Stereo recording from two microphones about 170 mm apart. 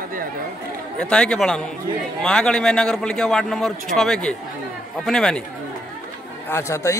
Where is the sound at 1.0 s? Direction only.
5° left (ahead or behind).